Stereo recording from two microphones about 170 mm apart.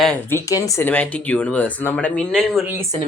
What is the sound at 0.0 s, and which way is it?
Speech, 10° left (ahead or behind).